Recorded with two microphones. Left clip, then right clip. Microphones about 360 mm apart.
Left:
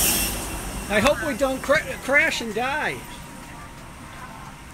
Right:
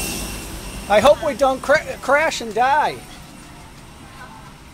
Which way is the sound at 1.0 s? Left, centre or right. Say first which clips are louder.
Right 6 dB; right.